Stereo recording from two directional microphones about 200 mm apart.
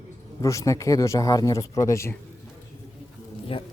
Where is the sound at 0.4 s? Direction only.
15° left (ahead or behind).